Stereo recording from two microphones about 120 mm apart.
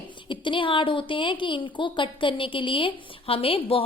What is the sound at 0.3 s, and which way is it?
A woman's voice, 45° left (ahead or behind).